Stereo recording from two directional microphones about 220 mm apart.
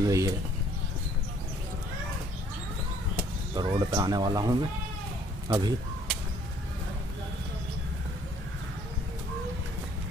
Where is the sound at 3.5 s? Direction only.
20° right (ahead or behind).